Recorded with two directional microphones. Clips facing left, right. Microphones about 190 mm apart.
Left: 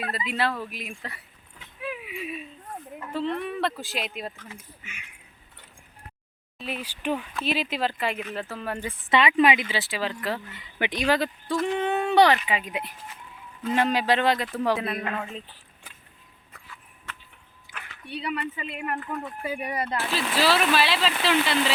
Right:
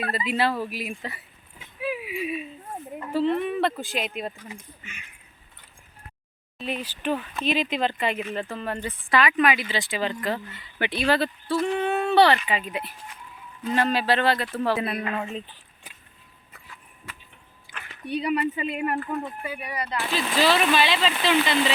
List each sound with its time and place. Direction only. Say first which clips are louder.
0.0 s speech: right 3 dB; centre (ahead or behind)
6.6 s speech: right 3 dB; 5° left (ahead or behind)
9.0 s speech: left 1 dB; 25° left (ahead or behind)
9.6 s speech: right 2 dB; 5° left (ahead or behind)
10.5 s speech: even; 15° left (ahead or behind)
14.8 s speech: right 2 dB; centre (ahead or behind)
17.1 s a sound: left 1 dB; 10° right (ahead or behind)
17.7 s a sound: even; centre (ahead or behind)
18.1 s speech: right 6 dB; 15° right (ahead or behind)
19.4 s speech: left 3 dB; 40° left (ahead or behind)
20.0 s speech: right 3 dB; 5° left (ahead or behind)